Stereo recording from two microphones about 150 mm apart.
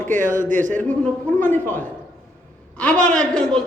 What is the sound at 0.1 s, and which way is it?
Speech, 60° right (ahead or behind).